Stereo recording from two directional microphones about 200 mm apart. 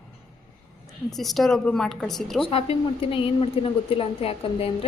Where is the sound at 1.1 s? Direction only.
Centre (ahead or behind).